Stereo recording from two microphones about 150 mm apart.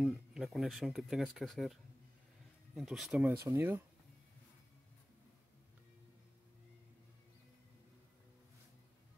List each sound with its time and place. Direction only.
0.0 s speech: centre (ahead or behind)
3.4 s speech: 15° right (ahead or behind)